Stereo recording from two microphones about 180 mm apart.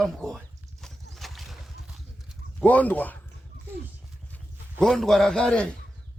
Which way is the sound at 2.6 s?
10° left (ahead or behind).